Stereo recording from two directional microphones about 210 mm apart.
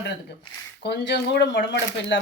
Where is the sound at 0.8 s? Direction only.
50° left (ahead or behind).